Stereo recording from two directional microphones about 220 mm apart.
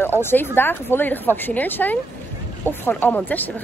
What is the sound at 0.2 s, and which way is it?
Speech, 10° left (ahead or behind).